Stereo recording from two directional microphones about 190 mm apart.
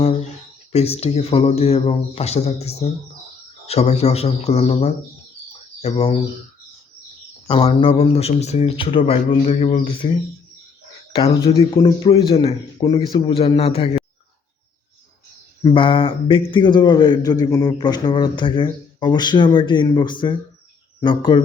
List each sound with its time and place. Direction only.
0.7 s speech: 35° left (ahead or behind)
7.4 s speech: 30° left (ahead or behind)
11.3 s a man's voice: 20° left (ahead or behind)
15.6 s a man's voice: 25° left (ahead or behind)